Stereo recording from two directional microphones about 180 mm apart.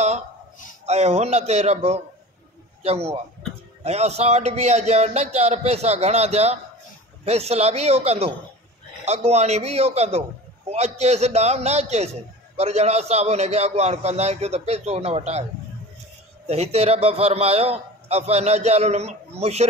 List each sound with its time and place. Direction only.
0.8 s a man's voice: 35° right (ahead or behind)
16.4 s a man's voice: 35° right (ahead or behind)